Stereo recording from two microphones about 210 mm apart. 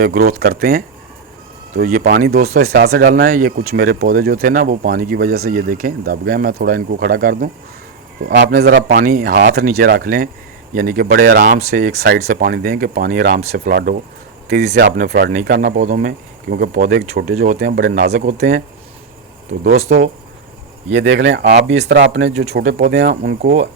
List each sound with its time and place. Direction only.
0.0 s speech: 45° right (ahead or behind)
15.4 s speech: 60° right (ahead or behind)
15.8 s speech: 40° right (ahead or behind)
18.3 s speech: 40° right (ahead or behind)
19.7 s speech: 30° right (ahead or behind)
20.9 s speech: 60° right (ahead or behind)